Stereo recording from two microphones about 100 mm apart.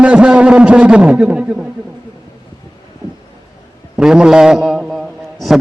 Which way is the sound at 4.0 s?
5° right (ahead or behind).